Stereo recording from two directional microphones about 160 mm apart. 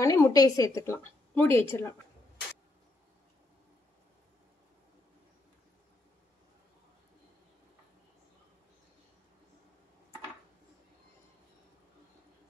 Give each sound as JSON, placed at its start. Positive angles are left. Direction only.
{"t": 0.0, "sound": "a woman's voice", "side_deg": 20}